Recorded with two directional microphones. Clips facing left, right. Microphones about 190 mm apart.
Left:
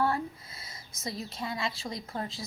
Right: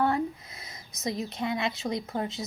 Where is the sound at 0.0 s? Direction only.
20° right (ahead or behind).